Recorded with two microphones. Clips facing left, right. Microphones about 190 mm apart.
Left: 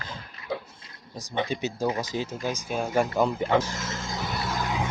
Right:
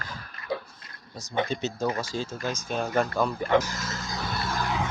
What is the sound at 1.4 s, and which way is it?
Speech, 15° left (ahead or behind).